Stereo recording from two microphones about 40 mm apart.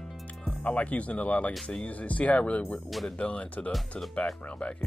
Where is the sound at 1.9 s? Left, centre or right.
Left.